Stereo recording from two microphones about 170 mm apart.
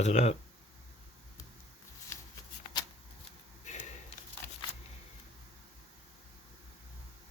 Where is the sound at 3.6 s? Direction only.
45° left (ahead or behind).